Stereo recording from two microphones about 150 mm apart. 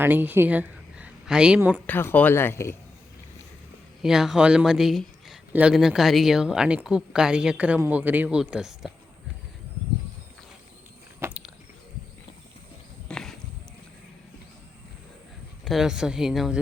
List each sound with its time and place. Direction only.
0.0 s a woman's voice: 15° right (ahead or behind)
1.9 s speech: 15° left (ahead or behind)
4.0 s speech: 5° right (ahead or behind)
11.2 s a sound: 15° right (ahead or behind)
13.1 s a sound: 5° left (ahead or behind)
15.6 s speech: centre (ahead or behind)